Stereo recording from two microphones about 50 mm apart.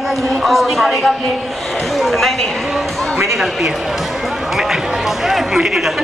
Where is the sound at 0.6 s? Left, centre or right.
Centre.